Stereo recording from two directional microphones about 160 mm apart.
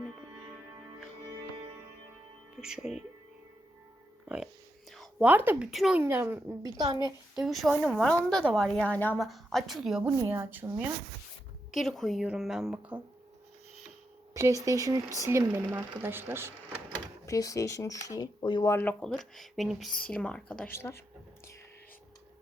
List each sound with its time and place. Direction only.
2.6 s a woman's voice: 5° right (ahead or behind)
5.2 s a woman's voice: 10° right (ahead or behind)
7.3 s a woman's voice: centre (ahead or behind)
9.1 s a woman's voice: centre (ahead or behind)
10.1 s a woman's voice: 15° right (ahead or behind)
11.7 s a woman's voice: centre (ahead or behind)
14.3 s a woman's voice: 20° right (ahead or behind)
17.2 s speech: 20° left (ahead or behind)
18.7 s speech: 15° left (ahead or behind)
19.0 s a woman's voice: centre (ahead or behind)